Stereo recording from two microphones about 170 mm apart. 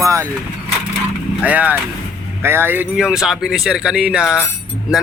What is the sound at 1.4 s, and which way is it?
A man's voice, 10° right (ahead or behind).